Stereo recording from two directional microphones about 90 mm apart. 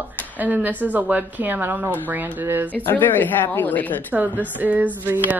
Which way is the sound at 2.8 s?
20° left (ahead or behind).